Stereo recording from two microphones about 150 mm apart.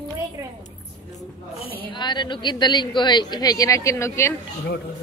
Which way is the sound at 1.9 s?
30° left (ahead or behind).